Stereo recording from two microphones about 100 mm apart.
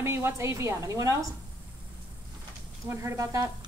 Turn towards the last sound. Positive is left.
turn(degrees=-35)  # may be behind; listen again after turning